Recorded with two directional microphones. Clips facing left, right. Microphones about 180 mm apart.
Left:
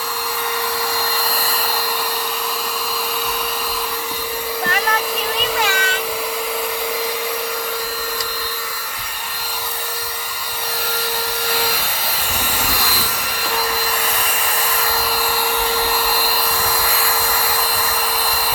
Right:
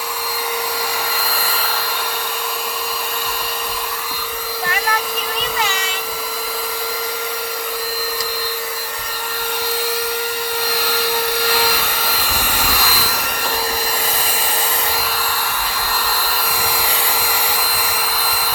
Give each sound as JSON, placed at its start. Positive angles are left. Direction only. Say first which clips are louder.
{"t": 10.8, "sound": "vacuum cleaner", "louder": "right 2 dB", "side_deg": -75}
{"t": 12.8, "sound": "a sound", "louder": "right 2 dB", "side_deg": -85}
{"t": 16.6, "sound": "vacuum cleaner", "louder": "left 1 dB", "side_deg": -15}